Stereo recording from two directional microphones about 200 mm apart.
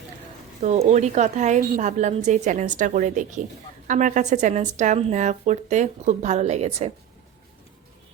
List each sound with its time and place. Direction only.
0.6 s speech: 35° right (ahead or behind)